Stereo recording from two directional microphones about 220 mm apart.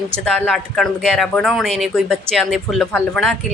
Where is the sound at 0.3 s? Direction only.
5° left (ahead or behind).